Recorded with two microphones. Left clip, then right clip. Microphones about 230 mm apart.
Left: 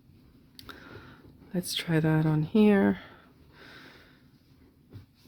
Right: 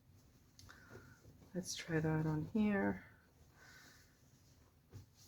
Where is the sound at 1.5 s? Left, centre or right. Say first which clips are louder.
Left 12 dB; left.